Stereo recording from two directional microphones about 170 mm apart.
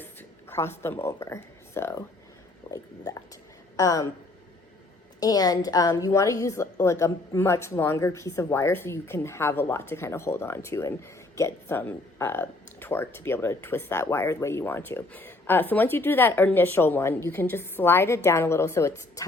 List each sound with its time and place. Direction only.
0.0 s speech: 10° left (ahead or behind)
2.6 s a sound: 20° left (ahead or behind)
3.8 s speech: 20° left (ahead or behind)
5.2 s a woman's voice: 20° left (ahead or behind)